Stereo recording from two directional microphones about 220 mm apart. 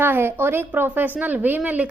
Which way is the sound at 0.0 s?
10° right (ahead or behind).